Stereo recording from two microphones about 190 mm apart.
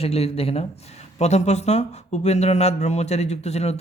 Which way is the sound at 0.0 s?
30° left (ahead or behind).